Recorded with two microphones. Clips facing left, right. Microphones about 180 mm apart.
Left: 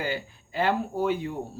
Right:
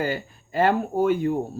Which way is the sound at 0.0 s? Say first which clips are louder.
Right 4 dB; 45° right (ahead or behind).